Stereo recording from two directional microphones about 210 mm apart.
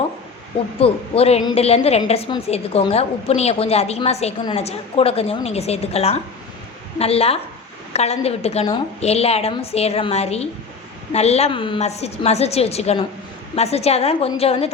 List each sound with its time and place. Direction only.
0.8 s a woman's voice: 30° left (ahead or behind)